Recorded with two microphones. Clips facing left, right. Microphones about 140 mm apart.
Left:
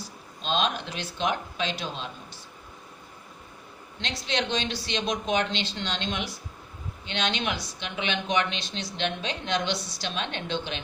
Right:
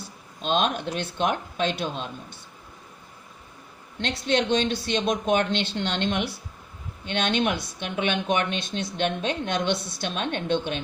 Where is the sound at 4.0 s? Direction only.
55° right (ahead or behind).